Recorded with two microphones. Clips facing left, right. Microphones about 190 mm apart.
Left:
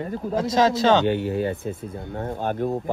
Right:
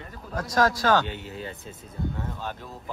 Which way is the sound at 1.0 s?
60° left (ahead or behind).